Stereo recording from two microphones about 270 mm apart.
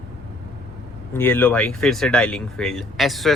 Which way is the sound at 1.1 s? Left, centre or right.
Centre.